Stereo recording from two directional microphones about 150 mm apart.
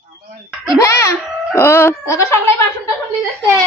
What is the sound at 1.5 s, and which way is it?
Speech, 15° left (ahead or behind).